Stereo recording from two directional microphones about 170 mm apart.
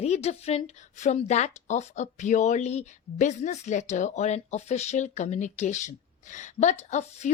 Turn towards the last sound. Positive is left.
turn(degrees=40)  # may be behind; listen again after turning